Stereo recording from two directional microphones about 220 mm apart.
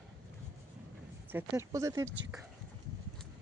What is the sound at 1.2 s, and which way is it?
Speech, 10° right (ahead or behind).